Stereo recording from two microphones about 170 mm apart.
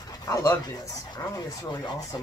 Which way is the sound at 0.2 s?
20° left (ahead or behind).